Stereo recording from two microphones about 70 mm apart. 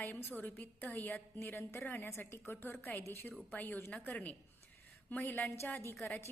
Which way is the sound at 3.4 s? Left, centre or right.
Left.